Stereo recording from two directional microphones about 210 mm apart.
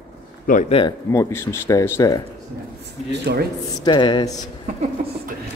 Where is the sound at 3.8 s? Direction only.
20° left (ahead or behind).